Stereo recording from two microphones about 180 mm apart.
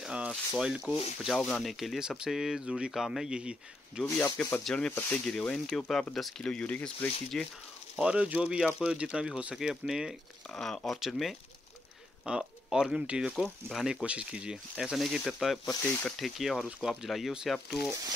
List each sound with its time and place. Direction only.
0.0 s rub: 5° right (ahead or behind)
1.2 s speech: centre (ahead or behind)
4.0 s speech: 10° left (ahead or behind)
7.9 s speech: 5° right (ahead or behind)
15.7 s speech: 15° left (ahead or behind)
16.1 s speech: centre (ahead or behind)